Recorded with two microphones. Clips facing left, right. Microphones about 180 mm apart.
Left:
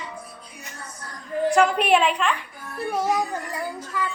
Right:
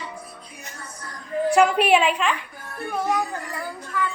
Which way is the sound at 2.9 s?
10° left (ahead or behind).